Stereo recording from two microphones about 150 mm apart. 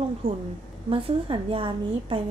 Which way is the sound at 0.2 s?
35° right (ahead or behind).